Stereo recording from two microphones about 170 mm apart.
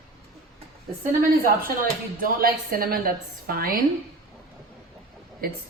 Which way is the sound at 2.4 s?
60° right (ahead or behind).